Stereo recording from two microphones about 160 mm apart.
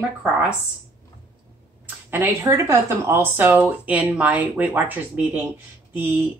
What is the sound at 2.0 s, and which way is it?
A woman's voice, 15° right (ahead or behind).